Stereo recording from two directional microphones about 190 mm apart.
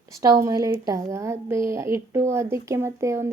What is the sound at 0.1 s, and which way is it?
A woman's voice, 15° right (ahead or behind).